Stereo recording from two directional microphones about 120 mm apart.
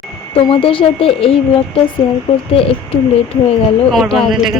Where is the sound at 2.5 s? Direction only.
50° left (ahead or behind).